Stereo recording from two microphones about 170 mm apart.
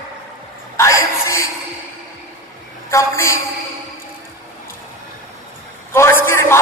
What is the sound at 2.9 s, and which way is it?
Speech, 15° left (ahead or behind).